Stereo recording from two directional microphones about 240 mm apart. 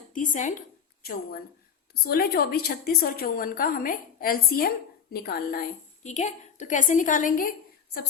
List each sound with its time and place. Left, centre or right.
0.1 s a woman's voice: left